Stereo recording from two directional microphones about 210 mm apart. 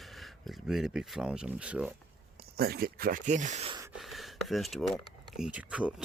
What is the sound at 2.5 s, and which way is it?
Speech, 50° right (ahead or behind).